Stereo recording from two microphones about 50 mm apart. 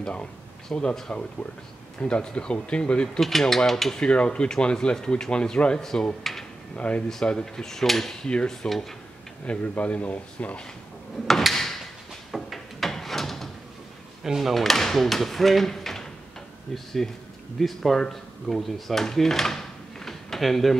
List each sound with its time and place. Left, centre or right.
0.0 s speech: left
3.2 s speech: centre
4.0 s speech: left; by 6.4 s centre
6.7 s speech: left
7.2 s speech: centre
8.3 s speech: centre
8.6 s speech: centre
9.5 s speech: left
11.2 s drawer open or close: centre
14.2 s speech: centre
14.6 s speech: centre